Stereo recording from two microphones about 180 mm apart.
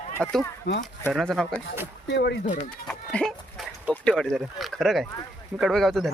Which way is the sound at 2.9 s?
5° left (ahead or behind).